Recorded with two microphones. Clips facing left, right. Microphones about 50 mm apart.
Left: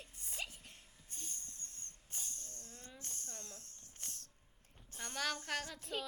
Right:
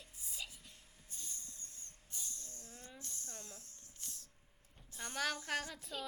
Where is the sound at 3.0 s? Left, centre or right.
Left.